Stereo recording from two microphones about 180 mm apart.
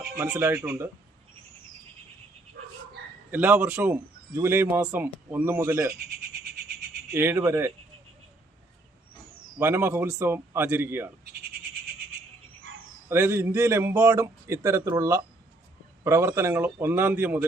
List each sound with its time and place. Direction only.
0.2 s speech: 15° right (ahead or behind)
3.3 s speech: 10° right (ahead or behind)
5.9 s bird: 55° right (ahead or behind)
7.1 s speech: 10° right (ahead or behind)
9.6 s speech: 10° right (ahead or behind)
13.1 s speech: 10° right (ahead or behind)